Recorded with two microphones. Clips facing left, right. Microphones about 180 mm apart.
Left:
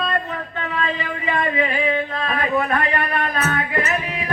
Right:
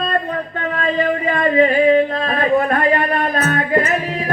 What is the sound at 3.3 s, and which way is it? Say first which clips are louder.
Music: right 4 dB; 45° right (ahead or behind).